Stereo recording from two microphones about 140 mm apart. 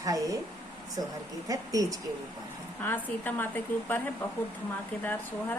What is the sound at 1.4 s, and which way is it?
Speech, 25° right (ahead or behind).